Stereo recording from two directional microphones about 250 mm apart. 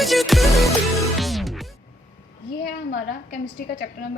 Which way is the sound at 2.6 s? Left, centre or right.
Left.